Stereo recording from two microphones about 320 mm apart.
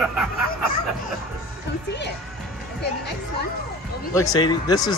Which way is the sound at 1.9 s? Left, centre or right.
Left.